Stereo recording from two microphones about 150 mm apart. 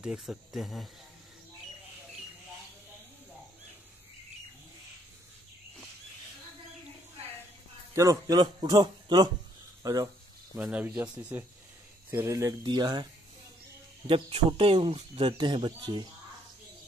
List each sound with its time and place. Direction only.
0.0 s speech: 5° right (ahead or behind)
7.9 s a man's voice: 20° right (ahead or behind)
10.5 s a man's voice: 10° right (ahead or behind); by 13.0 s 30° right (ahead or behind)
14.0 s speech: 35° right (ahead or behind)